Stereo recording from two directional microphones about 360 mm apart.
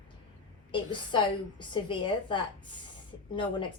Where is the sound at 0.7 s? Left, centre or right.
Centre.